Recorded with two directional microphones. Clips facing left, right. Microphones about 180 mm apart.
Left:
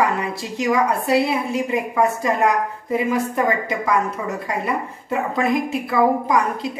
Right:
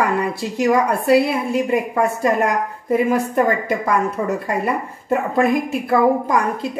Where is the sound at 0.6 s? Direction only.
55° right (ahead or behind).